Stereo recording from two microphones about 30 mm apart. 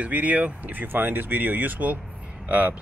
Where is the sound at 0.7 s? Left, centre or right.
Right.